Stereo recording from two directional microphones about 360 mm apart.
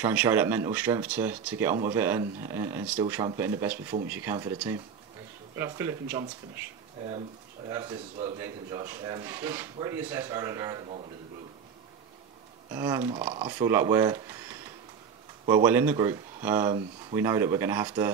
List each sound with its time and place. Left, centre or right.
0.0 s speech: centre
12.7 s speech: centre